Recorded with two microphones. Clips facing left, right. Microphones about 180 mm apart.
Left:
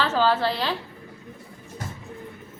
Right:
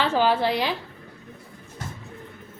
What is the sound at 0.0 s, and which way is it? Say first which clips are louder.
Speech: right 1 dB; 15° right (ahead or behind).